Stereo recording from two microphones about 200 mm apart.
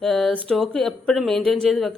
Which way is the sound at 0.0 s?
Centre (ahead or behind).